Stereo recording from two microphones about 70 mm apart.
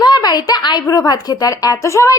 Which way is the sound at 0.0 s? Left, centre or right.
Left.